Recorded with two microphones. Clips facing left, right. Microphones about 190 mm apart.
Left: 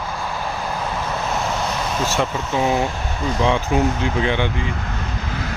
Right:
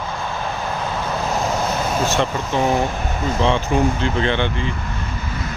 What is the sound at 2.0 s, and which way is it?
Speech, 5° left (ahead or behind).